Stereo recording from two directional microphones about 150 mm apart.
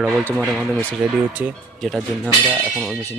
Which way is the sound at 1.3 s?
10° right (ahead or behind).